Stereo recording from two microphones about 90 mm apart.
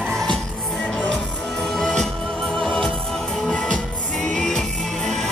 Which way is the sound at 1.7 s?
5° left (ahead or behind).